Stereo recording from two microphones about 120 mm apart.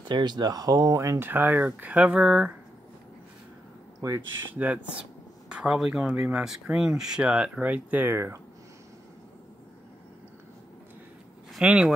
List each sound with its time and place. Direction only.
0.1 s speech: 35° right (ahead or behind); by 2.5 s 5° right (ahead or behind)
4.6 s speech: 10° right (ahead or behind)
11.5 s speech: 5° right (ahead or behind)